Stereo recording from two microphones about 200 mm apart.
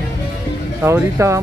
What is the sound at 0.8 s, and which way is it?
Speech, 15° right (ahead or behind).